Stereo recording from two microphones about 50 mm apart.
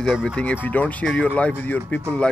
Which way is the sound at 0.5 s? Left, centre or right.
Left.